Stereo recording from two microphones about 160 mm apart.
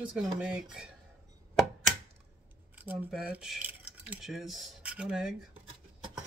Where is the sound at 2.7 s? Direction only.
10° right (ahead or behind).